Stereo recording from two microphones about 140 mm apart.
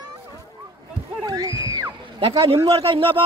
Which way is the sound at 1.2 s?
30° right (ahead or behind).